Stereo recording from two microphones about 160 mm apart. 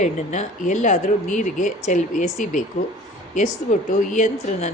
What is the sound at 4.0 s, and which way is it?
Speech, 50° left (ahead or behind).